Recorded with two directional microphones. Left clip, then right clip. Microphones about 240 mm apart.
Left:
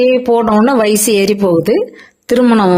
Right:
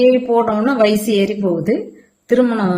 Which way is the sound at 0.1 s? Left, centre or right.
Left.